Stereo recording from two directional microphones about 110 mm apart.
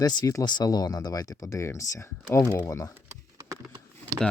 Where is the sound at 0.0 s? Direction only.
40° left (ahead or behind).